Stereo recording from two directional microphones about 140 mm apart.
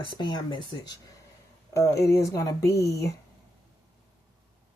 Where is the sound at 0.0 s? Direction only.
35° left (ahead or behind).